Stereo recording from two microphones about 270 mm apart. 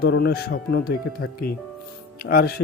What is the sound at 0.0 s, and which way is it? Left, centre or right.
Speech, left.